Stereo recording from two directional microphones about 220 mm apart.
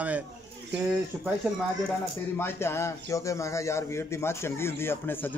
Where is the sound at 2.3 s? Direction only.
10° left (ahead or behind).